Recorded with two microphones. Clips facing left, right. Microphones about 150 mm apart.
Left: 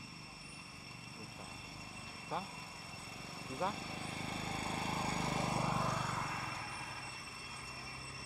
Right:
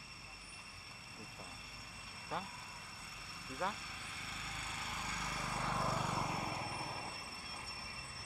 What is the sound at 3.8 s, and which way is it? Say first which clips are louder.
Vehicle: left 8 dB; 35° left (ahead or behind).